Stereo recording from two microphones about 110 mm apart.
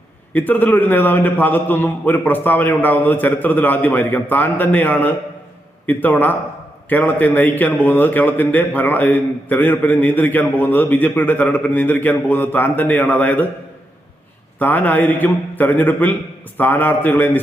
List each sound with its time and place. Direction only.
0.3 s a man's voice: 15° left (ahead or behind)
14.6 s a man's voice: 15° left (ahead or behind)